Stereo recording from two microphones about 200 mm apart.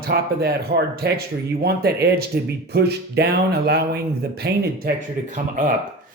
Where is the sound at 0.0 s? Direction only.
50° right (ahead or behind).